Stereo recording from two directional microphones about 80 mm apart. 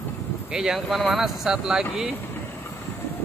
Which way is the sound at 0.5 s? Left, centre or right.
Centre.